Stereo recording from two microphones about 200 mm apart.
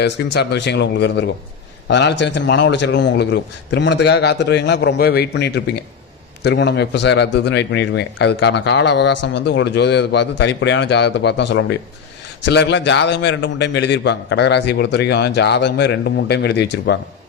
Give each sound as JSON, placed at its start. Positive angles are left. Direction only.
{"t": 0.0, "sound": "a man's voice", "side_deg": 60}